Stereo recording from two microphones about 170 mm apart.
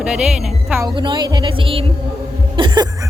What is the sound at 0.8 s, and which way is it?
Speech, 25° right (ahead or behind).